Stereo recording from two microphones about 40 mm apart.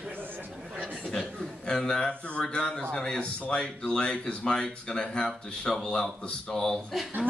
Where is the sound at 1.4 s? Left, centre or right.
Centre.